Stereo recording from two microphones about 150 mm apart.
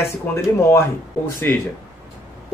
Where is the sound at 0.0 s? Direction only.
15° left (ahead or behind).